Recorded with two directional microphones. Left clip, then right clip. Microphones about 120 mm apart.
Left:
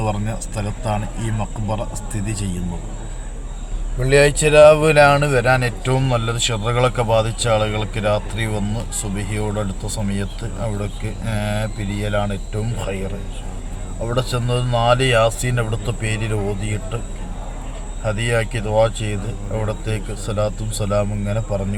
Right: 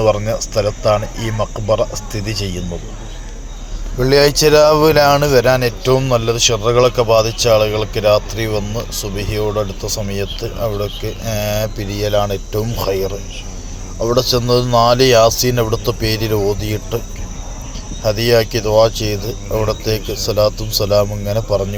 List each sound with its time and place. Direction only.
0.0 s speech: 30° right (ahead or behind)
4.0 s speech: 35° right (ahead or behind)
18.0 s speech: 25° right (ahead or behind)